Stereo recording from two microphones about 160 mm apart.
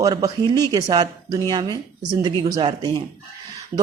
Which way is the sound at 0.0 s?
20° right (ahead or behind).